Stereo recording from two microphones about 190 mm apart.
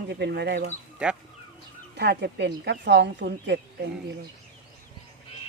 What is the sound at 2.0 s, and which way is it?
Speech, 60° right (ahead or behind).